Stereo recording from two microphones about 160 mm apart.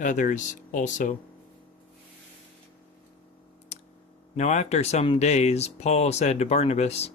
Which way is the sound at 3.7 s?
45° left (ahead or behind).